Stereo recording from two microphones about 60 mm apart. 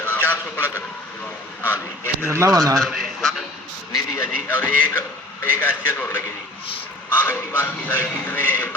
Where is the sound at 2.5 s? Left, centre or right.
Right.